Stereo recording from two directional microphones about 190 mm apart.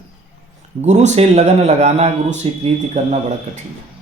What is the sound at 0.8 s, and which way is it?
Speech, 35° right (ahead or behind).